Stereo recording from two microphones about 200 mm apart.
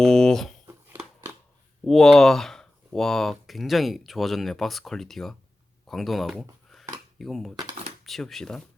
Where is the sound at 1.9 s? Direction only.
Centre (ahead or behind).